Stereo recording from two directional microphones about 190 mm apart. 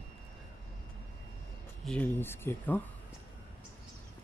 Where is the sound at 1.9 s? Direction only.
10° left (ahead or behind).